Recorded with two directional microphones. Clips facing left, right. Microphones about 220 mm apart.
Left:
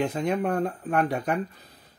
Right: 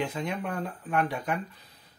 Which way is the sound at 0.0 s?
45° left (ahead or behind).